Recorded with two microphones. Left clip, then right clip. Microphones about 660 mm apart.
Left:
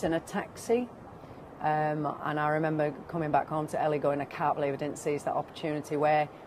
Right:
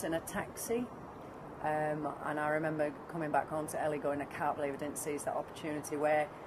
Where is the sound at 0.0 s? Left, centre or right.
Left.